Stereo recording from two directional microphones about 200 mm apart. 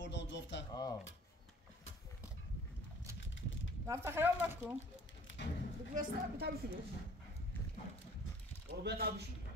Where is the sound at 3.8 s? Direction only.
15° right (ahead or behind).